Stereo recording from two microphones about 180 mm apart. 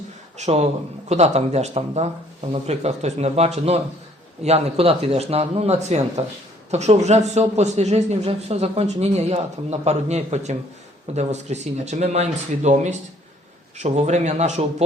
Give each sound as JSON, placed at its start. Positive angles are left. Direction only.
{"t": 0.3, "sound": "a man's voice", "side_deg": -40}